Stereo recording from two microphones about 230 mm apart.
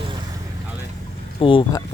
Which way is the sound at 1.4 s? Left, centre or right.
Left.